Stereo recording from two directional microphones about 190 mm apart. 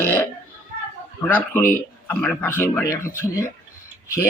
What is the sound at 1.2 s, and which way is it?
Speech, 10° left (ahead or behind).